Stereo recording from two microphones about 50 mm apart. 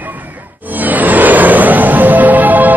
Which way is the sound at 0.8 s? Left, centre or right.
Right.